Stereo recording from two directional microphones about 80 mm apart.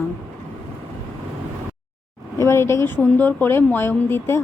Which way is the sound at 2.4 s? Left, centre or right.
Left.